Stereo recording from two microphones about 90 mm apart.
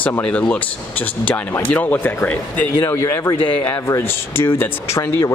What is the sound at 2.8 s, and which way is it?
Speech, 35° left (ahead or behind).